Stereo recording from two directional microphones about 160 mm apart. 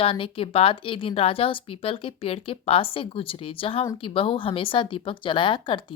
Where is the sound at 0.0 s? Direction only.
35° left (ahead or behind).